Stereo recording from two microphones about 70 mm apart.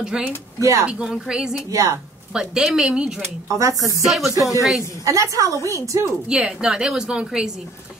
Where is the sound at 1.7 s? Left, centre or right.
Right.